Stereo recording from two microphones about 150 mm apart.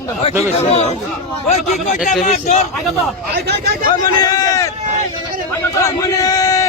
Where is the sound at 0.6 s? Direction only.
45° left (ahead or behind).